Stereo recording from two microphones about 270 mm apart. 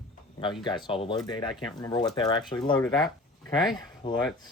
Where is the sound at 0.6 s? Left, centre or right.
Centre.